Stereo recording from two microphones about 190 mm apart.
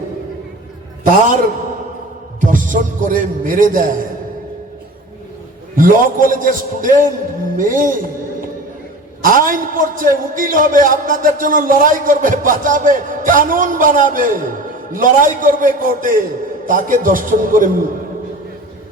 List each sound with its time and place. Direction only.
2.4 s a man's voice: 45° right (ahead or behind)
5.7 s a man's voice: 45° right (ahead or behind)
9.2 s a man's voice: 45° right (ahead or behind)